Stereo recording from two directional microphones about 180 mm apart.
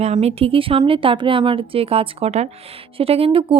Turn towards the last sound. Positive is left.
turn(degrees=-30)  # may be behind; listen again after turning